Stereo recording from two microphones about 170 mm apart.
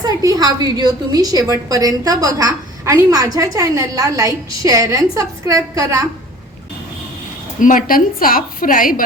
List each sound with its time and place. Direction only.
0.0 s a woman's voice: 20° right (ahead or behind)
7.6 s a woman's voice: 50° left (ahead or behind)